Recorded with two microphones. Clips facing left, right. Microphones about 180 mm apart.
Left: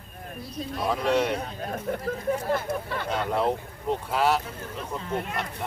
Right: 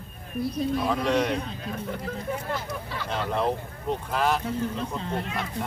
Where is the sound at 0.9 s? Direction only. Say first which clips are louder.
Left 4 dB; 5° left (ahead or behind).